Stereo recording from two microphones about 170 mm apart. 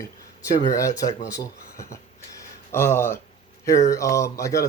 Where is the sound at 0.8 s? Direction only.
20° left (ahead or behind).